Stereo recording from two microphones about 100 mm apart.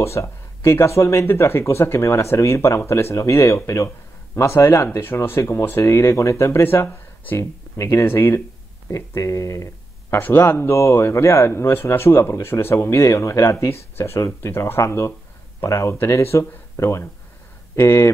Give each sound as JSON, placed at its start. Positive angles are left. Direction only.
{"t": 0.0, "sound": "speech", "side_deg": 30}